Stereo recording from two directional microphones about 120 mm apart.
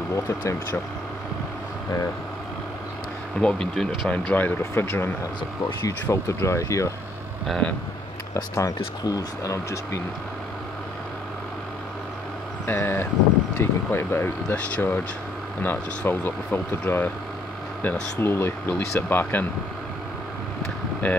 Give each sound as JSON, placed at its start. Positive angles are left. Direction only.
{"t": 0.1, "sound": "speech", "side_deg": 25}
{"t": 3.3, "sound": "speech", "side_deg": 5}
{"t": 7.4, "sound": "speech", "side_deg": 5}
{"t": 8.4, "sound": "speech", "side_deg": 30}
{"t": 12.6, "sound": "speech", "side_deg": 20}
{"t": 18.2, "sound": "speech", "side_deg": 20}
{"t": 21.0, "sound": "speech", "side_deg": 15}